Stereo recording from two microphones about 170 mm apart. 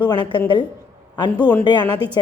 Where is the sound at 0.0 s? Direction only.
25° left (ahead or behind).